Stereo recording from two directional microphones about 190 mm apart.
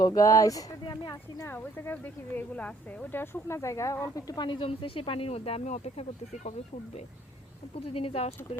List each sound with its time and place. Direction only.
0.0 s speech: 20° left (ahead or behind); by 6.5 s 35° left (ahead or behind)
7.8 s speech: 30° left (ahead or behind)